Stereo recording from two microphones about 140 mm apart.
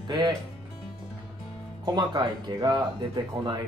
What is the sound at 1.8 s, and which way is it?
Speech, 30° right (ahead or behind).